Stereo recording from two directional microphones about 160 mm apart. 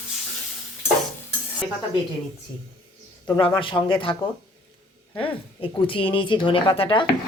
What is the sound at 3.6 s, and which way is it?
Speech, 30° left (ahead or behind).